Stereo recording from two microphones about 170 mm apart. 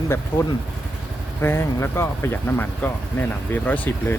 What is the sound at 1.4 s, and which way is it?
Speech, 15° left (ahead or behind).